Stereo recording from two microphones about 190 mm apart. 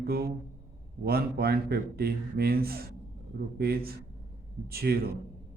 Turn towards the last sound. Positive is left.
turn(degrees=-55)  # may be behind; listen again after turning